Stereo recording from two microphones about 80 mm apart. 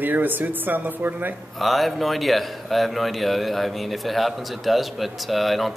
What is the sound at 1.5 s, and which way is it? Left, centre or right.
A man's voice, centre.